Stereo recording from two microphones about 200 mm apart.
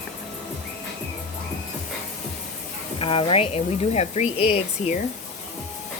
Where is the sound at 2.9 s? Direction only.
25° left (ahead or behind).